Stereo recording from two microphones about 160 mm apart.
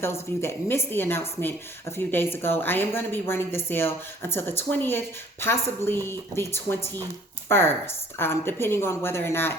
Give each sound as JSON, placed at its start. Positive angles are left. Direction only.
{"t": 0.0, "sound": "a woman's voice", "side_deg": 15}